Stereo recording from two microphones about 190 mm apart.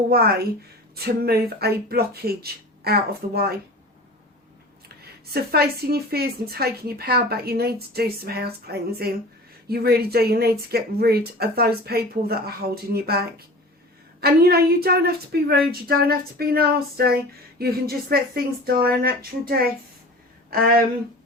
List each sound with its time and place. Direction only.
0.1 s speech: 55° right (ahead or behind)
5.2 s speech: 55° right (ahead or behind)